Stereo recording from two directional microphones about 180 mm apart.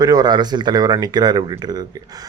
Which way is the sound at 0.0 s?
20° right (ahead or behind).